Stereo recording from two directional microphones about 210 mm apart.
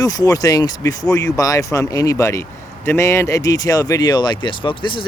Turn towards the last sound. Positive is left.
turn(degrees=25)  # may be behind; listen again after turning